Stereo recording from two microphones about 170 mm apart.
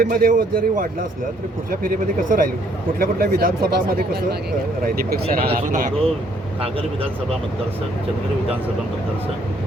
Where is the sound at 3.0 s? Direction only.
60° right (ahead or behind).